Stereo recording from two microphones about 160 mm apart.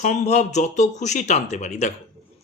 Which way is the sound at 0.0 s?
45° left (ahead or behind).